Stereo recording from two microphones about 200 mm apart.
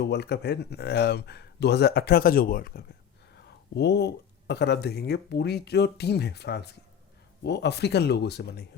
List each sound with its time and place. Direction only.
0.0 s speech: 55° left (ahead or behind)